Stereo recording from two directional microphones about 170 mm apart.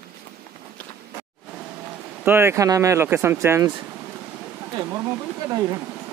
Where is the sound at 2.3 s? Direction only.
15° right (ahead or behind).